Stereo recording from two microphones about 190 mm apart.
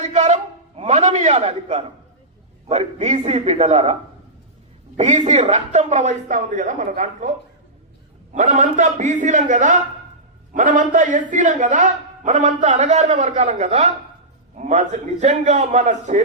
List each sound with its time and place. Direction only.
0.0 s a sound: 40° right (ahead or behind)
0.8 s a man's voice: 35° right (ahead or behind)
4.9 s a man's voice: 40° right (ahead or behind)